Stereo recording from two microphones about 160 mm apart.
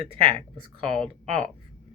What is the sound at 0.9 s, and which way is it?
Speech, 5° left (ahead or behind).